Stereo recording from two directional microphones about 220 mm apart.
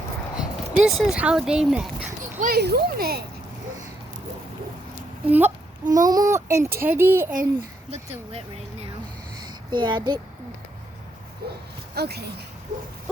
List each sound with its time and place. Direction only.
0.3 s speech: centre (ahead or behind)
2.4 s speech: 45° right (ahead or behind)
5.2 s a child's voice: 10° right (ahead or behind)
7.9 s speech: 30° right (ahead or behind)
9.4 s a sound: 20° right (ahead or behind)
11.4 s speech: 45° right (ahead or behind)